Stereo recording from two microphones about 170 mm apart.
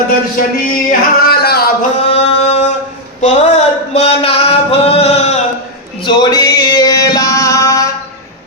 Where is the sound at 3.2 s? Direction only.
40° left (ahead or behind).